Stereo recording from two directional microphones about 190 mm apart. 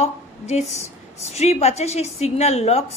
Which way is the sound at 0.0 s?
35° left (ahead or behind).